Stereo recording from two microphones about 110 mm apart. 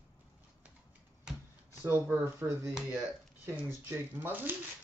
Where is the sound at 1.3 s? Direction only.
5° right (ahead or behind).